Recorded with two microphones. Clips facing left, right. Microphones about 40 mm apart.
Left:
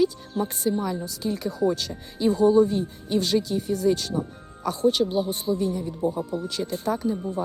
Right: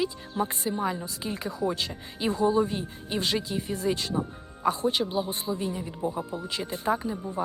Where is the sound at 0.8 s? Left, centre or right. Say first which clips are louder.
Left 2 dB; right.